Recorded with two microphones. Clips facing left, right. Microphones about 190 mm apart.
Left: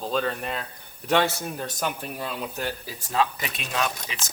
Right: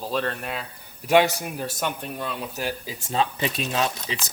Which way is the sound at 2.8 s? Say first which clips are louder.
Left 1 dB; 20° right (ahead or behind).